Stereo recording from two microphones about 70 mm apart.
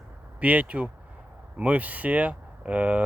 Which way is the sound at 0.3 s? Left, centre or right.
Right.